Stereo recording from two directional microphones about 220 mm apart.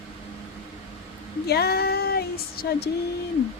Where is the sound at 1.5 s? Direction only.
45° left (ahead or behind).